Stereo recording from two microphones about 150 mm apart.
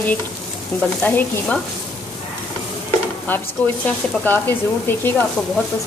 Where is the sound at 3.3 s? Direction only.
15° left (ahead or behind).